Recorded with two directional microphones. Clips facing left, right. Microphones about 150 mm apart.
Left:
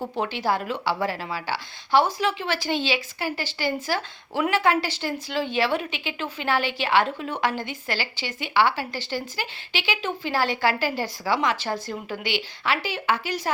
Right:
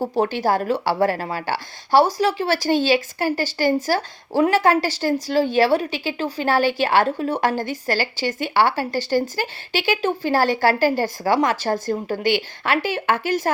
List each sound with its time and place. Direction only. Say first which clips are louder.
0.0 s speech: right 6 dB; 40° right (ahead or behind)